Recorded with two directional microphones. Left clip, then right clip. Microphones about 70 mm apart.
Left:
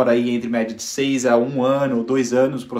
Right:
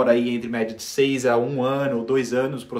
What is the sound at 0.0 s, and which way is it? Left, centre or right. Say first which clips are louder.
Speech: left 2 dB; right.